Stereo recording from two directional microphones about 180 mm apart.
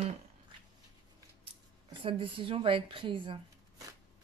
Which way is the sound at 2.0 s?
30° right (ahead or behind).